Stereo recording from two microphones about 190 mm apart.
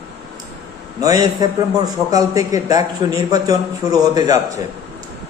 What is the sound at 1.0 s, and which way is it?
A man's voice, 20° right (ahead or behind).